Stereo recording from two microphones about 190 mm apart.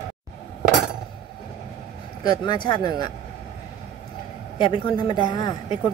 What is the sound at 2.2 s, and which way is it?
Speech, 25° left (ahead or behind).